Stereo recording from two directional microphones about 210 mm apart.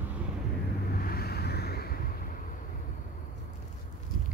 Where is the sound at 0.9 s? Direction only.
45° left (ahead or behind).